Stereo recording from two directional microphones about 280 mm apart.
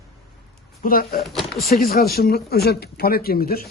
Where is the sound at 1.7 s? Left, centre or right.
Left.